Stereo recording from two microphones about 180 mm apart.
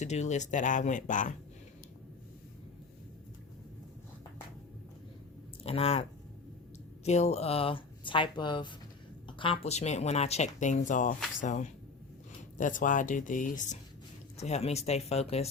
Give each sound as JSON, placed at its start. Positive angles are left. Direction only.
{"t": 0.0, "sound": "speech", "side_deg": 40}
{"t": 5.6, "sound": "speech", "side_deg": 35}